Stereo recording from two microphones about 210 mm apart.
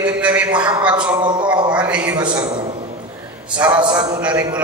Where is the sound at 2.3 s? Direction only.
20° right (ahead or behind).